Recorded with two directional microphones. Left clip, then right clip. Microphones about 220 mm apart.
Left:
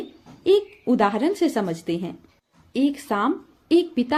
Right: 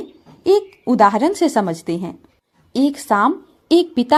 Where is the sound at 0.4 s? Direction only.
30° right (ahead or behind).